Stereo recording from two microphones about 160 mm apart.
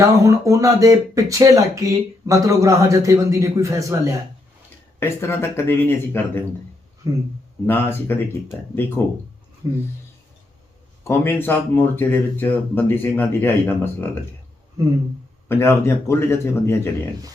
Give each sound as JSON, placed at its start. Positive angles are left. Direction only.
{"t": 0.0, "sound": "speech", "side_deg": -20}
{"t": 4.9, "sound": "speech", "side_deg": 15}
{"t": 7.0, "sound": "speech", "side_deg": -20}
{"t": 7.7, "sound": "speech", "side_deg": 15}
{"t": 9.6, "sound": "speech", "side_deg": -20}
{"t": 11.0, "sound": "speech", "side_deg": 15}
{"t": 15.4, "sound": "speech", "side_deg": 15}